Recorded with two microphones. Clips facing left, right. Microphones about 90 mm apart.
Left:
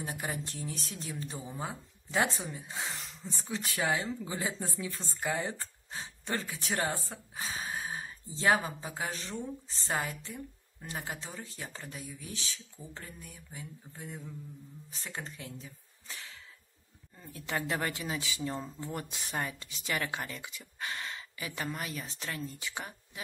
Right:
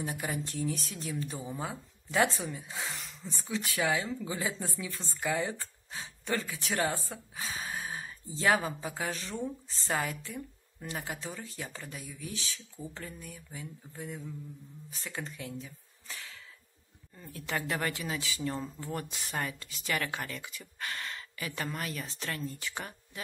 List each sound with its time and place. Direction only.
0.0 s speech: 30° left (ahead or behind)
16.1 s whip: 25° left (ahead or behind)
17.2 s speech: 20° left (ahead or behind)